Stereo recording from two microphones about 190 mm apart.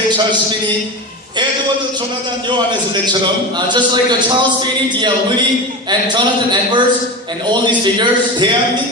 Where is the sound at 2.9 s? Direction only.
25° right (ahead or behind).